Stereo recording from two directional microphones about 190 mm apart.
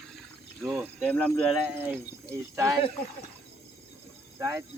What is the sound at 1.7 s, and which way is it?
Speech, 15° right (ahead or behind).